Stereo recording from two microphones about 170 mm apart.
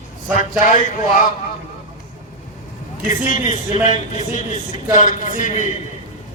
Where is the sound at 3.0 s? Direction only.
50° left (ahead or behind).